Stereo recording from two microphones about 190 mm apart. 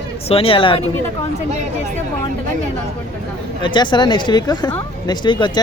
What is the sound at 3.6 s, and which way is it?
Speech, 25° left (ahead or behind).